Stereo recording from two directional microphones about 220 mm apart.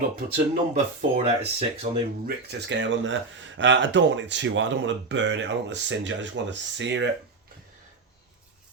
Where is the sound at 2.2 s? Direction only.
50° right (ahead or behind).